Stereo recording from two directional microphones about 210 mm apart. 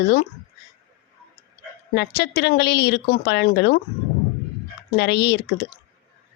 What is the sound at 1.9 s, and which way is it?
A woman's voice, 50° left (ahead or behind).